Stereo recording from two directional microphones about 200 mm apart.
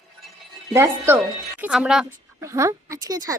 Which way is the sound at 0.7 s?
15° right (ahead or behind).